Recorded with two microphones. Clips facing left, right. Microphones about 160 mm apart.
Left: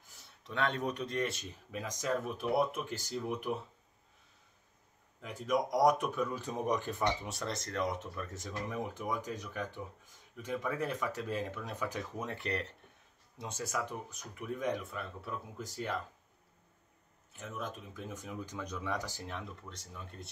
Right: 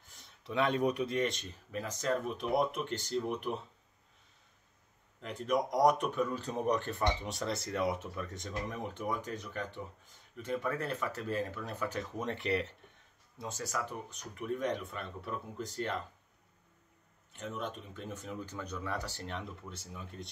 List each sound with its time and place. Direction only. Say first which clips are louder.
0.1 s a sound: right 1 dB; 5° left (ahead or behind)
0.5 s speech: right 4 dB; 10° right (ahead or behind); by 3.0 s 5° left (ahead or behind)
5.2 s speech: right 1 dB; 10° left (ahead or behind)
7.3 s speech: right 2 dB; 5° right (ahead or behind)
13.4 s speech: even; 15° left (ahead or behind)
17.3 s speech: right 2 dB; 5° left (ahead or behind)
19.7 s speech: right 2 dB; 5° right (ahead or behind)